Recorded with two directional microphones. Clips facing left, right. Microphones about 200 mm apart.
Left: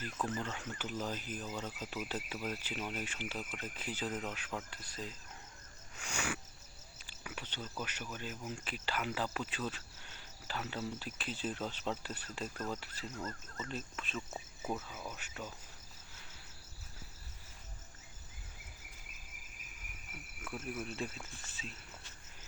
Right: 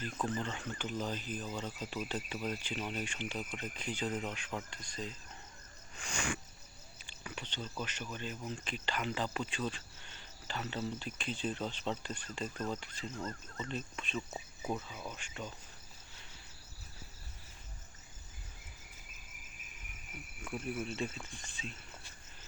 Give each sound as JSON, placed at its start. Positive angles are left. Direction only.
{"t": 0.3, "sound": "speech", "side_deg": 5}
{"t": 20.4, "sound": "speech", "side_deg": 0}